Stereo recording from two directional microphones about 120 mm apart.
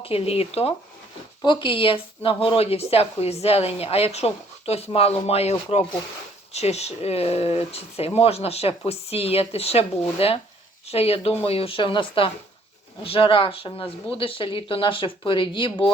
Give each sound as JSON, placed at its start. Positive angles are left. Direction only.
{"t": 0.0, "sound": "speech", "side_deg": 55}
{"t": 1.5, "sound": "speech", "side_deg": 40}